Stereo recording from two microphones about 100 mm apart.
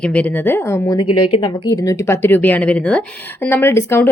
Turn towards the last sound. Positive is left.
turn(degrees=25)  # may be behind; listen again after turning